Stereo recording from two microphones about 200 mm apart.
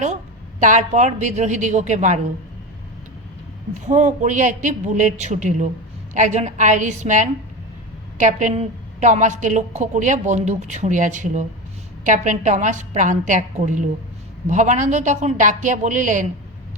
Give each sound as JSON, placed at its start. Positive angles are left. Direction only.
{"t": 0.6, "sound": "a woman's voice", "side_deg": -40}
{"t": 3.8, "sound": "a woman's voice", "side_deg": -35}